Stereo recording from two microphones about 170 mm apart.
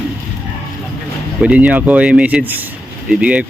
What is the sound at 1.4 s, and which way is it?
A man's voice, 5° right (ahead or behind).